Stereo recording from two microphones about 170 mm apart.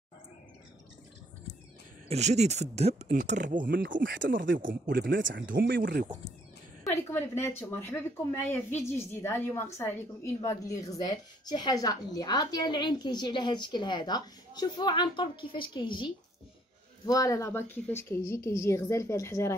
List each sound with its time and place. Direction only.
2.0 s speech: 40° right (ahead or behind); by 6.0 s 60° right (ahead or behind)
6.8 s a woman's voice: 15° left (ahead or behind)